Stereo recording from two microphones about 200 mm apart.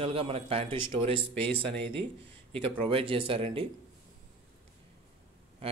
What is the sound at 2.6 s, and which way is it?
A man's voice, 25° right (ahead or behind).